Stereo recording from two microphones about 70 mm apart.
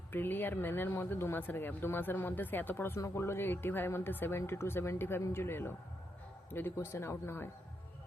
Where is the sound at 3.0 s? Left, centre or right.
Left.